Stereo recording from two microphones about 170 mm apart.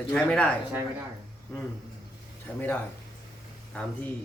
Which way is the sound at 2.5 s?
10° left (ahead or behind).